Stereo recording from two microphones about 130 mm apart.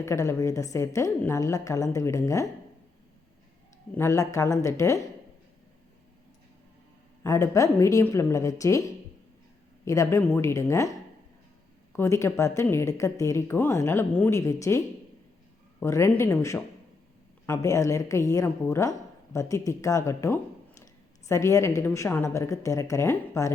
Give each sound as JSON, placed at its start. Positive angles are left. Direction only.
{"t": 0.0, "sound": "a woman's voice", "side_deg": 25}
{"t": 3.9, "sound": "a woman's voice", "side_deg": 20}
{"t": 7.3, "sound": "a woman's voice", "side_deg": 25}
{"t": 9.8, "sound": "a woman's voice", "side_deg": 25}
{"t": 11.9, "sound": "a woman's voice", "side_deg": 20}
{"t": 15.8, "sound": "a woman's voice", "side_deg": 20}